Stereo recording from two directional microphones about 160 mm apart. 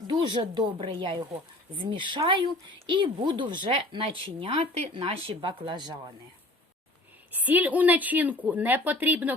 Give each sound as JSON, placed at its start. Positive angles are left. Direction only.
{"t": 0.1, "sound": "speech", "side_deg": -30}
{"t": 7.3, "sound": "speech", "side_deg": -10}